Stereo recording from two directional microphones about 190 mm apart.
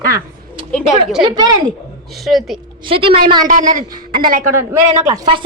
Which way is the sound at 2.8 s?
30° right (ahead or behind).